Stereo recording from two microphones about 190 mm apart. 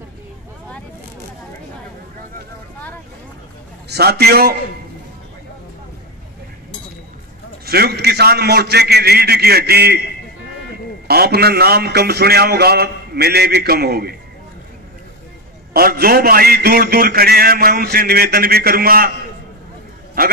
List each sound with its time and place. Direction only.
3.9 s a man's voice: 55° right (ahead or behind)
7.6 s a man's voice: 55° right (ahead or behind)
11.1 s a man's voice: 55° right (ahead or behind)
15.7 s a man's voice: 50° right (ahead or behind)
20.2 s a man's voice: 50° right (ahead or behind)